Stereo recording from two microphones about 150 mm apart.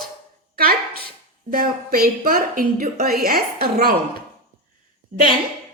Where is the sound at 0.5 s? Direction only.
85° right.